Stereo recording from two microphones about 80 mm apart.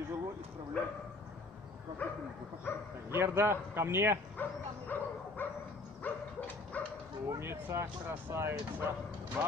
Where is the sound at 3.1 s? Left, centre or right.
Right.